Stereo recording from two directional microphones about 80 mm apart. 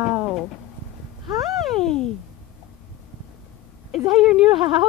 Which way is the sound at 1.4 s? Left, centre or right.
Centre.